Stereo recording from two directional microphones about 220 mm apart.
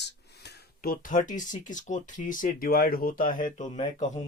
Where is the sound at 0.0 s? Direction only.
50° left (ahead or behind).